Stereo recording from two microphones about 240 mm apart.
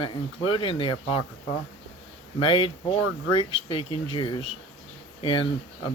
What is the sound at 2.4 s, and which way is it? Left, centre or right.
Speech, left.